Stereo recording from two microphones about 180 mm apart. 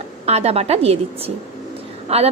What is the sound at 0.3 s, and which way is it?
Speech, 35° right (ahead or behind).